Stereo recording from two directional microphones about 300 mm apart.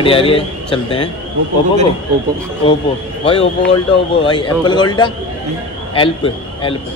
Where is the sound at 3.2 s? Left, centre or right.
Centre.